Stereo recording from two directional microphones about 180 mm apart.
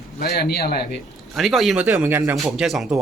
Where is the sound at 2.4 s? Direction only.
Centre (ahead or behind).